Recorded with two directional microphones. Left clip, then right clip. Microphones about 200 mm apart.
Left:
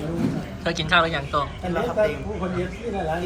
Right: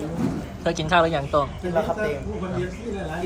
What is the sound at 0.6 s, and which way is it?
Speech, 20° right (ahead or behind).